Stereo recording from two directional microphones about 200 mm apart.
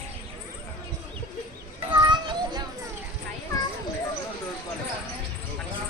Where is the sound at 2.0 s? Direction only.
25° right (ahead or behind).